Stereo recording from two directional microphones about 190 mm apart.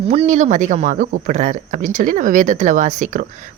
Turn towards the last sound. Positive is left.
turn(degrees=-40)  # may be behind; listen again after turning